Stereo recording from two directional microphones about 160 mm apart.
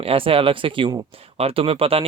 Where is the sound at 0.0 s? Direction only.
35° right (ahead or behind).